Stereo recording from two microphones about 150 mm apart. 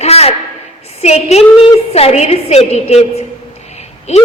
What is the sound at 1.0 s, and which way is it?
A woman's voice, 45° left (ahead or behind).